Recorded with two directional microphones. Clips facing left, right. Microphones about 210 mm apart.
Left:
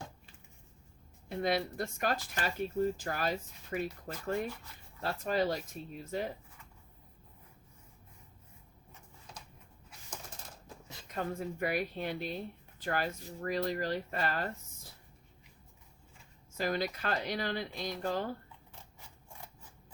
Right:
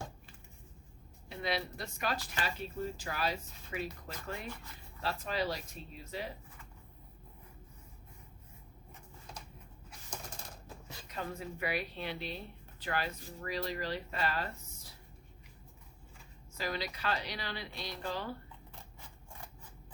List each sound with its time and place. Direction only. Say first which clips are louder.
1.3 s speech: left 5 dB; 50° left (ahead or behind)
11.1 s speech: left 4 dB; 50° left (ahead or behind)
16.6 s speech: left 5 dB; 50° left (ahead or behind)